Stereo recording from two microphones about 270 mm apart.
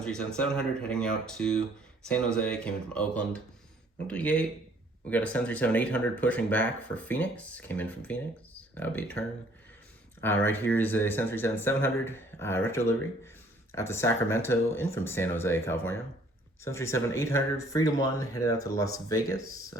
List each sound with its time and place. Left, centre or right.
0.0 s speech: centre
19.4 s speech: right